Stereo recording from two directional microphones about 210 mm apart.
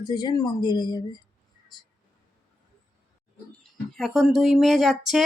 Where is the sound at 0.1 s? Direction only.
20° left (ahead or behind).